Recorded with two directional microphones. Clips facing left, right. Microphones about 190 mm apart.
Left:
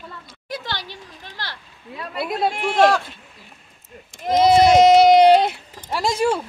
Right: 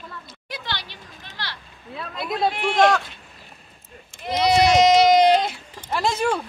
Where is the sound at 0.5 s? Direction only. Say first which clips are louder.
Left 3 dB; 45° left (ahead or behind).